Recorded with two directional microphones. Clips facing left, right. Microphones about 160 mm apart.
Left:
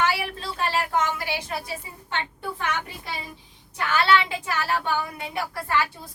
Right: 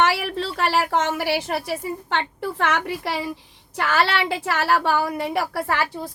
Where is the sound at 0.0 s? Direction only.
90° right.